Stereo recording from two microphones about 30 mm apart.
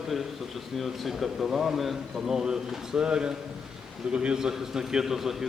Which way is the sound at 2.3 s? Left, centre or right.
Centre.